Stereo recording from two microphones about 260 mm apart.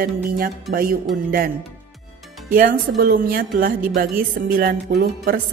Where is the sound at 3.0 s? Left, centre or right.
Right.